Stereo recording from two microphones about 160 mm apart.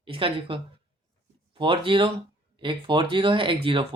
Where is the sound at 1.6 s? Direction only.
30° right (ahead or behind).